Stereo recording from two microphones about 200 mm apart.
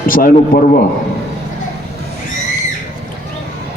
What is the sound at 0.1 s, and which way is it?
Speech, 45° left (ahead or behind).